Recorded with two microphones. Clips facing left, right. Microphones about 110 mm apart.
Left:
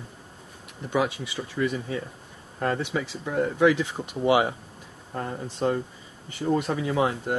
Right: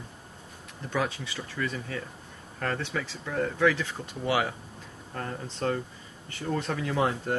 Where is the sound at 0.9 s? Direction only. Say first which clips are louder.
Left 4 dB; 15° left (ahead or behind).